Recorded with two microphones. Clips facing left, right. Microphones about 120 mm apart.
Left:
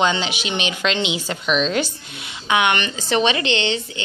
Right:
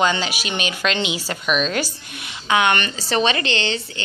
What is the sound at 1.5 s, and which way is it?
Speech, 10° right (ahead or behind).